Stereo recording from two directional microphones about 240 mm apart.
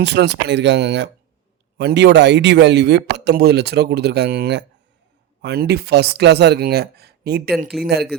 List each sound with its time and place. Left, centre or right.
0.0 s speech: right